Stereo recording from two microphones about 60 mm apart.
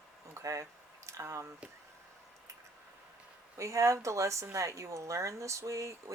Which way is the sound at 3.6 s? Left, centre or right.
Right.